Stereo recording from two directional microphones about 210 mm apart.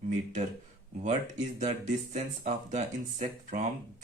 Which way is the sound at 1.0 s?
35° right (ahead or behind).